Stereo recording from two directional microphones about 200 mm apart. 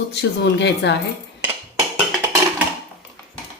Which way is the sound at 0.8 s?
60° left (ahead or behind).